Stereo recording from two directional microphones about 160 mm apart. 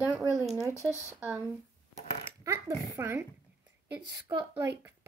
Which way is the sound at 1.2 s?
10° right (ahead or behind).